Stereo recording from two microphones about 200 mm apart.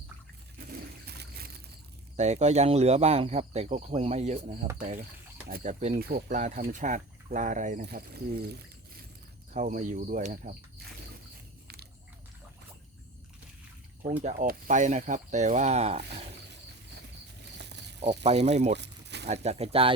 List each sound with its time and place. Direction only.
0.7 s bird: 50° right (ahead or behind)
2.1 s speech: 35° right (ahead or behind); by 8.6 s 55° right (ahead or behind)
9.5 s speech: 40° right (ahead or behind)
14.2 s speech: 45° right (ahead or behind)
17.6 s chicken: 60° right (ahead or behind)
18.2 s speech: 35° right (ahead or behind)
18.8 s a sound: 60° right (ahead or behind)
19.3 s speech: 30° right (ahead or behind)